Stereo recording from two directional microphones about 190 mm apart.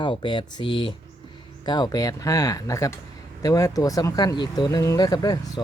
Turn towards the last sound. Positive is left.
turn(degrees=20)  # may be behind; listen again after turning